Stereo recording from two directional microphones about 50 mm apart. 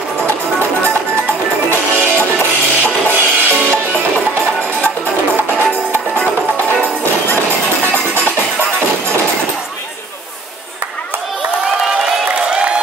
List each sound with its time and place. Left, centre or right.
2.0 s music: right
5.7 s music: left